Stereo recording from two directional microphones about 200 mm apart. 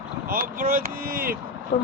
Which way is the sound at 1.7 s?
35° left (ahead or behind).